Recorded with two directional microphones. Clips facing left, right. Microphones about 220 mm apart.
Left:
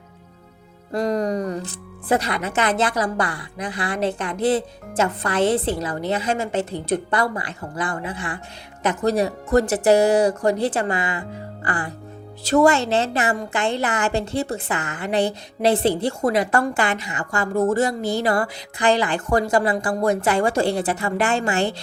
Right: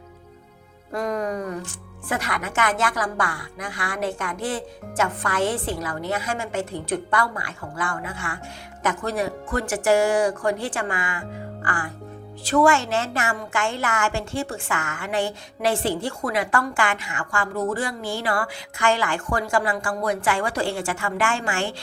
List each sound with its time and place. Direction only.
0.9 s a woman's voice: 35° left (ahead or behind)
6.7 s speech: 40° left (ahead or behind)
8.9 s speech: 40° left (ahead or behind)
13.7 s a woman's voice: 20° left (ahead or behind)
14.0 s speech: 35° left (ahead or behind)
14.4 s a woman's voice: 20° left (ahead or behind)
15.0 s speech: 35° left (ahead or behind)